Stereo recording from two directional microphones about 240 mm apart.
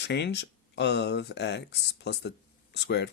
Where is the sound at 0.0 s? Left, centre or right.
Left.